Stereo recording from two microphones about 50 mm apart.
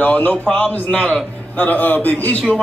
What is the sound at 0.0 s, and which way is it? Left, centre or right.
A man's voice, left.